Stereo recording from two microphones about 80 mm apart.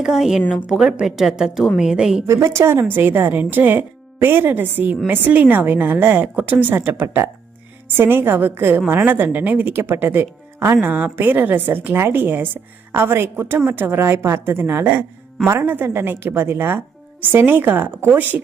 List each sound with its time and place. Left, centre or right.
0.0 s a woman's voice: centre
2.2 s speech: right